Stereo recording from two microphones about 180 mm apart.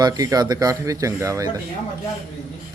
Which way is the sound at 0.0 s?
20° right (ahead or behind).